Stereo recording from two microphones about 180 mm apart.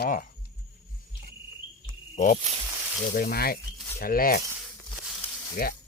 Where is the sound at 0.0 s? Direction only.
50° left (ahead or behind).